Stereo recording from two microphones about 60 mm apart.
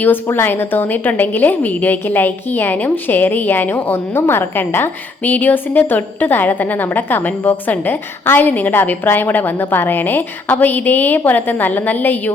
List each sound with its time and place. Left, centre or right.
0.3 s a woman's voice: left